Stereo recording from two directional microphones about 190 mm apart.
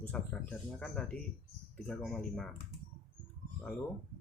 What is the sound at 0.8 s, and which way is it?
Speech, 5° left (ahead or behind).